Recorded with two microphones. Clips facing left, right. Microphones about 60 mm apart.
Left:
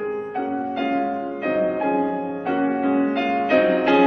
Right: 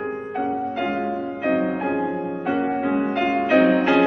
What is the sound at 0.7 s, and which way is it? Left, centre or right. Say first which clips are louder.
Music: left 2 dB; centre.